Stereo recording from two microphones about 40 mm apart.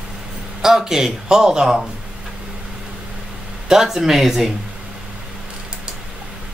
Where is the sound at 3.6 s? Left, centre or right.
Centre.